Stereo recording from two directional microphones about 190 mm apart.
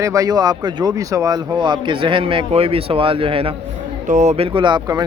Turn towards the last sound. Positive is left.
turn(degrees=-20)  # may be behind; listen again after turning